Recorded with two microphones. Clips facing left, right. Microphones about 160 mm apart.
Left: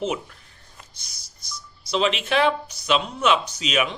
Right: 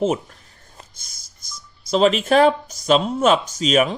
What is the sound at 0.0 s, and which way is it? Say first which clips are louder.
Speech: right 6 dB; 45° right (ahead or behind).